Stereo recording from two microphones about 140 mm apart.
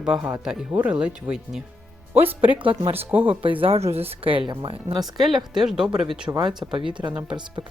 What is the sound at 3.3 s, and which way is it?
Speech, 40° right (ahead or behind).